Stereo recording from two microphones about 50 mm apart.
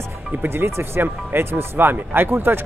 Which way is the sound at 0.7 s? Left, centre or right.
Right.